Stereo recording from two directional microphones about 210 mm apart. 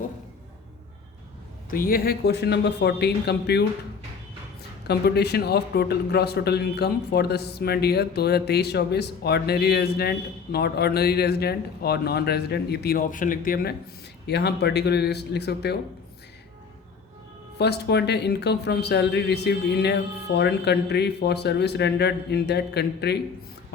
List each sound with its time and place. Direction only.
1.7 s speech: 45° left (ahead or behind)
4.9 s speech: 50° left (ahead or behind)
17.6 s speech: 50° left (ahead or behind)